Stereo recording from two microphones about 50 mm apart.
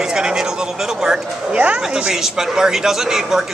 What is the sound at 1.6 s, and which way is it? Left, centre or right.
Speech, right.